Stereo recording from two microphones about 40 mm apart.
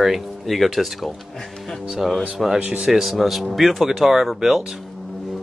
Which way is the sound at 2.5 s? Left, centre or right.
Right.